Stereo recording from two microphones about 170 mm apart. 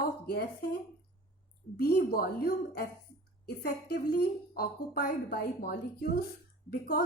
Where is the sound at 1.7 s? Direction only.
60° left (ahead or behind).